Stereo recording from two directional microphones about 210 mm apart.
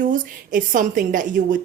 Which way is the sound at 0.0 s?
40° right (ahead or behind).